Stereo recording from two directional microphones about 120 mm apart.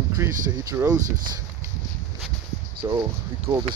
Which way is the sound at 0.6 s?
25° right (ahead or behind).